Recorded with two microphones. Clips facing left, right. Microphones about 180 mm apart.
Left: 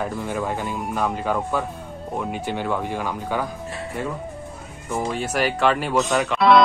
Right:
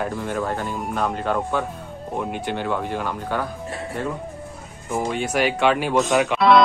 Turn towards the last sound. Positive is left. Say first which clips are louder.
# right 1 dB
turn(degrees=0)  # may be behind; listen again after turning